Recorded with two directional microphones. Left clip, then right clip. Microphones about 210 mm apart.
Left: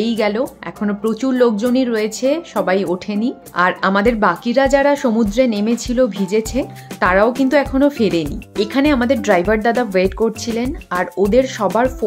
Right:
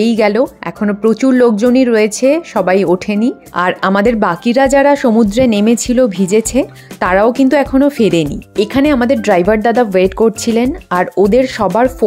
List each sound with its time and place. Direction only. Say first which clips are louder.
0.0 s speech: right 6 dB; 30° right (ahead or behind)